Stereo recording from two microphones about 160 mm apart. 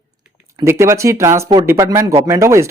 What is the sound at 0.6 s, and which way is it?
Speech, 15° right (ahead or behind).